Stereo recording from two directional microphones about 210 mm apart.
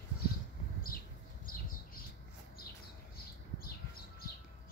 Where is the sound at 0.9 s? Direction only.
45° left (ahead or behind).